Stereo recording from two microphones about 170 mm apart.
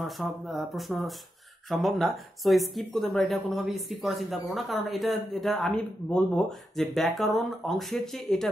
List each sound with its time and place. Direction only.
0.0 s speech: centre (ahead or behind)